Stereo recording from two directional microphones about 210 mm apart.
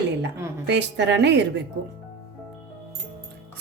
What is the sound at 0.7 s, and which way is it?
Speech, 55° right (ahead or behind).